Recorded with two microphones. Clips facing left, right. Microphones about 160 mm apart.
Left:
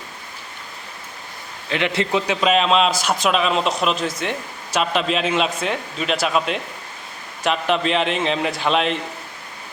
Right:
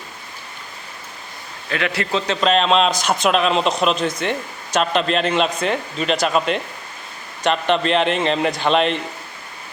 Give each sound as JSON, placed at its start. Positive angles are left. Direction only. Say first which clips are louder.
{"t": 1.7, "sound": "a man's voice", "louder": "left 1 dB", "side_deg": 25}
{"t": 2.2, "sound": "a man's voice", "louder": "right 3 dB", "side_deg": 10}